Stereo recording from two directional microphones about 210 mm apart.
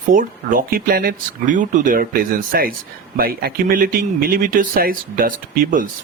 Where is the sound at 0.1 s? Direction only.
40° right (ahead or behind).